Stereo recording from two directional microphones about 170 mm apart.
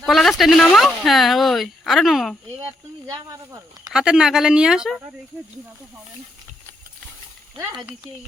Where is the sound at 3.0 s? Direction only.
20° right (ahead or behind).